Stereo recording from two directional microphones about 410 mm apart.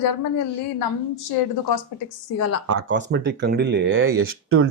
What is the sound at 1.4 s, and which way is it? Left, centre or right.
Speech, left.